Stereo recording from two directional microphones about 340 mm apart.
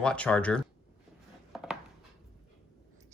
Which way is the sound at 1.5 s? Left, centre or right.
Centre.